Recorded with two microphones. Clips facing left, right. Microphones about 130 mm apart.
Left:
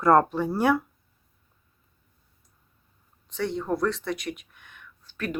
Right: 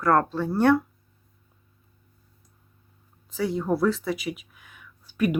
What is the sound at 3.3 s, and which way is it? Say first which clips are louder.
Speech: right 2 dB; 5° right (ahead or behind).